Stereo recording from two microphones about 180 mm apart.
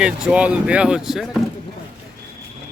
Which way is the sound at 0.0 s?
5° right (ahead or behind).